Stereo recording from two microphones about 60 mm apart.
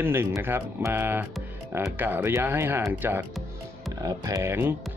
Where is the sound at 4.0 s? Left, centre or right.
Right.